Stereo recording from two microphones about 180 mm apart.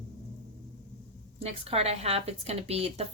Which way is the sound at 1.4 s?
35° right (ahead or behind).